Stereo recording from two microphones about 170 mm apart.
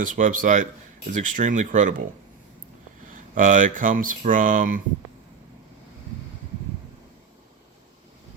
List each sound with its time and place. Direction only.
0.0 s speech: 50° right (ahead or behind)
3.1 s speech: 50° right (ahead or behind)